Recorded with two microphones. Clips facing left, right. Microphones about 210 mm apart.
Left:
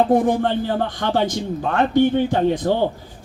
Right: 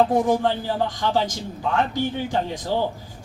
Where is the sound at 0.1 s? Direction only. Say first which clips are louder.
Left 3 dB; 60° left (ahead or behind).